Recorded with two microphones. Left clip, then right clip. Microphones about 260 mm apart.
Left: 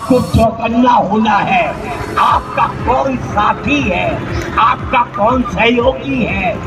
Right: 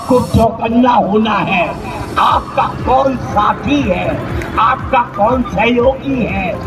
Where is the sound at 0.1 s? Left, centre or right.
Right.